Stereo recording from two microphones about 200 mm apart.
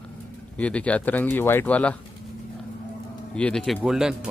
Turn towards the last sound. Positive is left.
turn(degrees=-5)  # may be behind; listen again after turning